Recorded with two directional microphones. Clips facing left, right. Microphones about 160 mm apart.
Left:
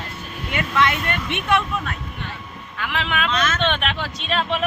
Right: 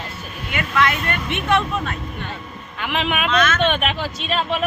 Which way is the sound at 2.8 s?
20° right (ahead or behind).